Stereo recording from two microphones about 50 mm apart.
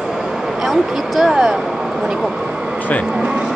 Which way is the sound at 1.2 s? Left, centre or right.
Centre.